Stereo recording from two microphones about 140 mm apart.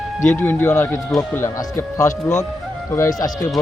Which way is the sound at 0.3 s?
15° left (ahead or behind).